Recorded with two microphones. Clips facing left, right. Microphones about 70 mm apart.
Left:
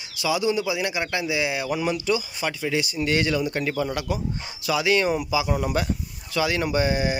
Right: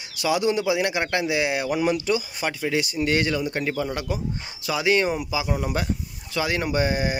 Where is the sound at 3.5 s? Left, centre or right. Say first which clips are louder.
Even; right.